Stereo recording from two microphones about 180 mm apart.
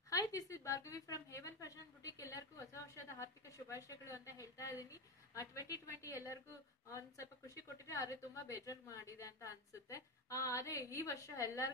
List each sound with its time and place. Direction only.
0.1 s a woman's voice: 20° left (ahead or behind)